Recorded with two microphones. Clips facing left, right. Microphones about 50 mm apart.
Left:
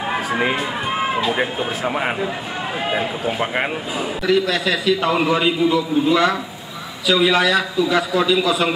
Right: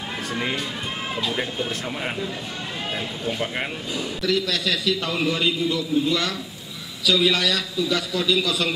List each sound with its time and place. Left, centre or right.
0.4 s a man's voice: left